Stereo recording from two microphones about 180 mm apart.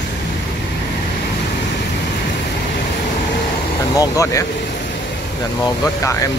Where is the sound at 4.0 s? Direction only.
15° left (ahead or behind).